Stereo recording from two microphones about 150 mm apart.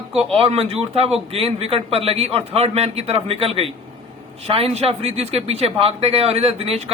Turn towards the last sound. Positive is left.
turn(degrees=-40)  # may be behind; listen again after turning